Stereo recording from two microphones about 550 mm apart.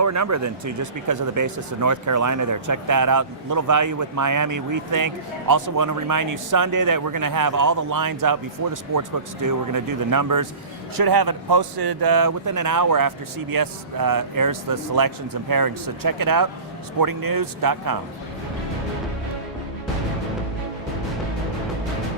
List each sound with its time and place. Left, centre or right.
0.0 s speech: right